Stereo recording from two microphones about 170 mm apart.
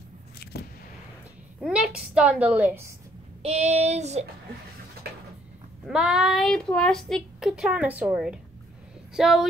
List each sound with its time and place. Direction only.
1.6 s a woman's voice: 5° right (ahead or behind)
3.4 s child singing: 40° right (ahead or behind)
5.1 s a sound: 70° right (ahead or behind)
5.9 s a woman's voice: 5° right (ahead or behind)